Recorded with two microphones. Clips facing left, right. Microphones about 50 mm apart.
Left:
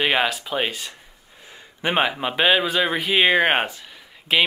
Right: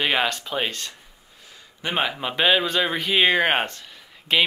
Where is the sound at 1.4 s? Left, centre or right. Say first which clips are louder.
Left 5 dB; left.